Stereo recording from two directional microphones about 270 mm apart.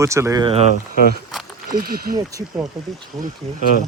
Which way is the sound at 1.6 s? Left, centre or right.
Right.